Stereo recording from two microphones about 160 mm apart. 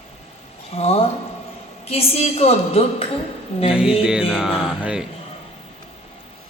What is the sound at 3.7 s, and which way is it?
Music, 5° right (ahead or behind).